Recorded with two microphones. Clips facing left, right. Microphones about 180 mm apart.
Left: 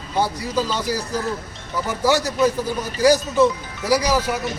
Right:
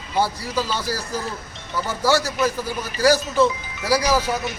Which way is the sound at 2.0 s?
15° left (ahead or behind).